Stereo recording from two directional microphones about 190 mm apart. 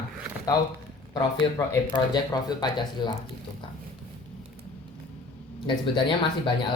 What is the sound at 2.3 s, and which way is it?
Speech, 25° left (ahead or behind).